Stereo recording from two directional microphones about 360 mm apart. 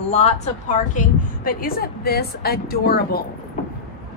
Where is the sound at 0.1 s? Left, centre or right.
Centre.